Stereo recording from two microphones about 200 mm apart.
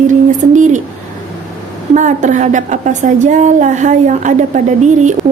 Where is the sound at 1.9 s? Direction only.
35° right (ahead or behind).